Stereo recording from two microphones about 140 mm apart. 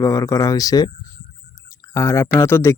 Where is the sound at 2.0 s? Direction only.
20° left (ahead or behind).